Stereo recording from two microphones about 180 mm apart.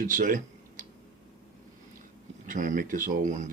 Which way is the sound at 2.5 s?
45° right (ahead or behind).